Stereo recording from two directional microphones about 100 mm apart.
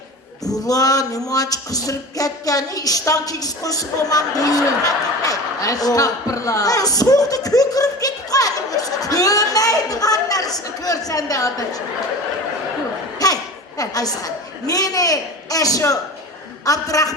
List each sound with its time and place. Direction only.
0.6 s a woman's voice: 35° left (ahead or behind)
13.1 s a woman's voice: 40° left (ahead or behind)